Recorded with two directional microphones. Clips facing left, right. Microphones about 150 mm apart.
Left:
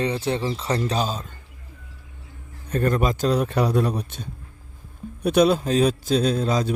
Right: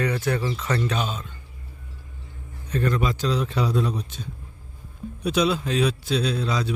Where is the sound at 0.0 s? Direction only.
25° left (ahead or behind).